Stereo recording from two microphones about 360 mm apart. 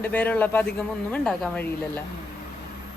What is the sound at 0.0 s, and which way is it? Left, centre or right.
A woman's voice, centre.